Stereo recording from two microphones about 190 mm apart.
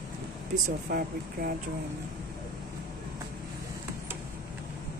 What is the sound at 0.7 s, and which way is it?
Speech, 50° right (ahead or behind).